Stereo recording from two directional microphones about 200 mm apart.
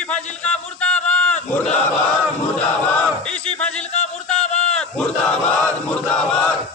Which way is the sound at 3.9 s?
35° left (ahead or behind).